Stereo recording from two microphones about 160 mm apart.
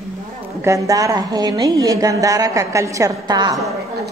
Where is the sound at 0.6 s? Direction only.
20° right (ahead or behind).